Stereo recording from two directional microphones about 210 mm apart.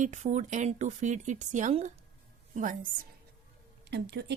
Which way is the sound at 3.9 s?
50° right (ahead or behind).